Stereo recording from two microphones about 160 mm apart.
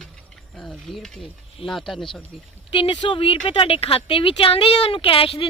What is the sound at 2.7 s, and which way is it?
A woman's voice, 35° left (ahead or behind).